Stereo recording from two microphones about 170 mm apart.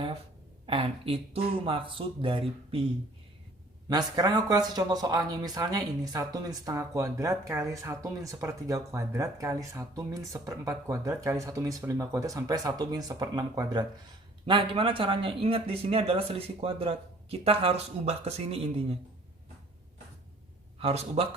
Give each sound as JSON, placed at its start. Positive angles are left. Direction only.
{"t": 0.7, "sound": "speech", "side_deg": -35}
{"t": 3.8, "sound": "speech", "side_deg": -25}
{"t": 20.7, "sound": "speech", "side_deg": -35}